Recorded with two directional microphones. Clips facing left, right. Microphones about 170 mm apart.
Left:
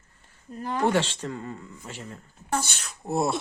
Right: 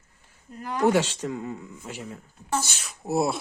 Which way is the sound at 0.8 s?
10° right (ahead or behind).